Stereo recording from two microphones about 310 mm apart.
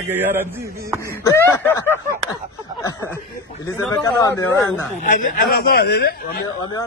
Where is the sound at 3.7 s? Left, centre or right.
Centre.